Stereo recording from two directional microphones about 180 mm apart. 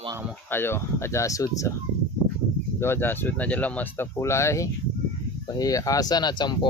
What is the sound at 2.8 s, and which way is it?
Speech, 10° left (ahead or behind).